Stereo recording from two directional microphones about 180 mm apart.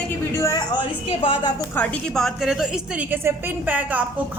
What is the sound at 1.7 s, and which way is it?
A woman's voice, 5° left (ahead or behind).